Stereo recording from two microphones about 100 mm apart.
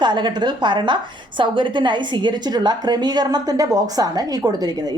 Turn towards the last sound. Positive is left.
turn(degrees=-40)  # may be behind; listen again after turning